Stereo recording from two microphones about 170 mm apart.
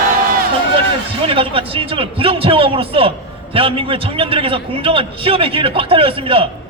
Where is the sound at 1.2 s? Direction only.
30° right (ahead or behind).